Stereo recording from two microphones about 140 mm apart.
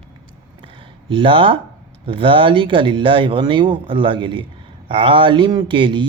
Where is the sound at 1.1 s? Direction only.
40° right (ahead or behind).